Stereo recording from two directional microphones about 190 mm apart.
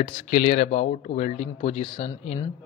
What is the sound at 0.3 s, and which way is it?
Speech, 40° left (ahead or behind).